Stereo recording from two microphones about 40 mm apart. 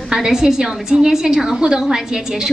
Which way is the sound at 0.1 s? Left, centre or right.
Centre.